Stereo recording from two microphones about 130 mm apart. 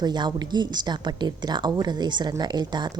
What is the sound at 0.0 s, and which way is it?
Speech, 35° right (ahead or behind).